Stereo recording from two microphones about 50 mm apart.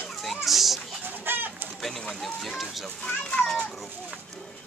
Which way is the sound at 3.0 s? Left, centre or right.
Left.